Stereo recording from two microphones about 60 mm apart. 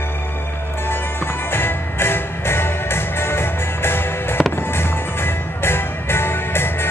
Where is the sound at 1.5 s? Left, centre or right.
Left.